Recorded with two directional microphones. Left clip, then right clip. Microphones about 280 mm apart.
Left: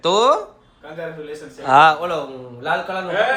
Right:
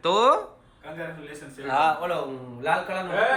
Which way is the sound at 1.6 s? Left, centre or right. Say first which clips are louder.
Left 10 dB; left.